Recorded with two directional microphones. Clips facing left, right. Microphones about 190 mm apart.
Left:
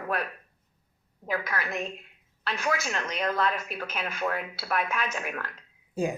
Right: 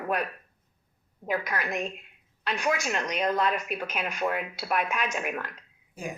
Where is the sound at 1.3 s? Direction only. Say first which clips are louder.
Right 1 dB; 15° right (ahead or behind).